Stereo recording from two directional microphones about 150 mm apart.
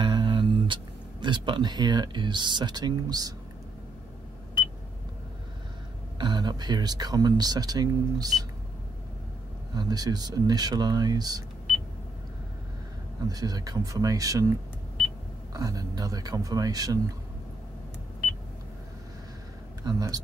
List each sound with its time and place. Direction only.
0.0 s a sound: 30° right (ahead or behind)
1.2 s speech: 30° right (ahead or behind)
6.1 s speech: 30° right (ahead or behind)
9.8 s speech: 25° right (ahead or behind)
13.3 s speech: 25° right (ahead or behind)
19.8 s speech: 25° right (ahead or behind)